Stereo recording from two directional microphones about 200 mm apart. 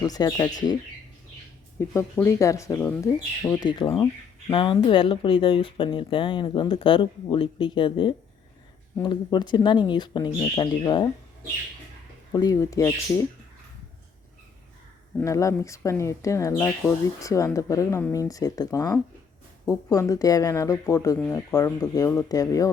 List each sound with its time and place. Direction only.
0.0 s speech: 20° left (ahead or behind)
1.9 s speech: 15° left (ahead or behind)
3.9 s a sound: 15° left (ahead or behind)
4.5 s speech: 25° left (ahead or behind)
12.3 s speech: 20° left (ahead or behind)
15.2 s speech: 15° left (ahead or behind)